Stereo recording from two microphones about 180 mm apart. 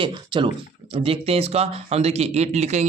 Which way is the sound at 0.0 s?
25° right (ahead or behind).